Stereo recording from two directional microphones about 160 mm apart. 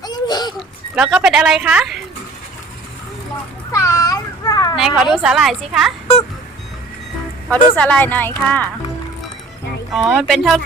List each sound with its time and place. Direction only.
0.0 s a sound: 25° left (ahead or behind)
0.9 s a woman's voice: 5° right (ahead or behind)
3.7 s a sound: 20° left (ahead or behind)
4.8 s a woman's voice: centre (ahead or behind)
7.5 s speech: 10° left (ahead or behind)
10.1 s a woman's voice: centre (ahead or behind)